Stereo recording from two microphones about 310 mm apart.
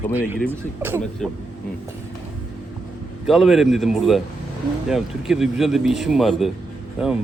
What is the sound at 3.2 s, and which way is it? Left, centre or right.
A man's voice, centre.